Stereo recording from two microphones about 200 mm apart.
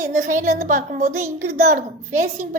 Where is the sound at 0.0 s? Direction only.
40° right (ahead or behind).